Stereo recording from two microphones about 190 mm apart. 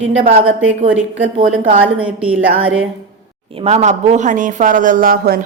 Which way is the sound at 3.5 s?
30° right (ahead or behind).